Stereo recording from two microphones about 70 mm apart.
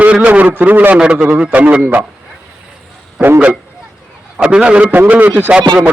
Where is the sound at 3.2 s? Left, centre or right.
Right.